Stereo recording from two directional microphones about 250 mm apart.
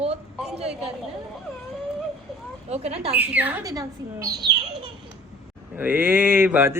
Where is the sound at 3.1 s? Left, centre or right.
Centre.